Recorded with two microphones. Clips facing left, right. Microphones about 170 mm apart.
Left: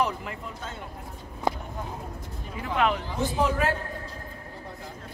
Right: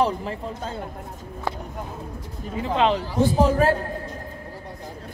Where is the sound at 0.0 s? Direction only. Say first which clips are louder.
Right 5 dB; 30° right (ahead or behind).